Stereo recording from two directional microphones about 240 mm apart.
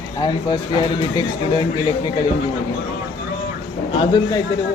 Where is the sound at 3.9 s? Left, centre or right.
Centre.